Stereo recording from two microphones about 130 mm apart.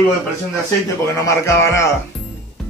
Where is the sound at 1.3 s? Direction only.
20° left (ahead or behind).